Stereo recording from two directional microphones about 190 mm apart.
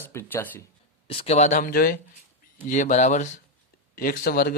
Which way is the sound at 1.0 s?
30° left (ahead or behind).